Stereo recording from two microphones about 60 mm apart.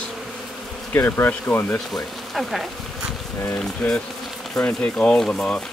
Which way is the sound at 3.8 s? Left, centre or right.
Centre.